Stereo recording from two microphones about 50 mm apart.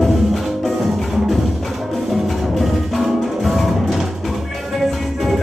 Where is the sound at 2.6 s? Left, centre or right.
Centre.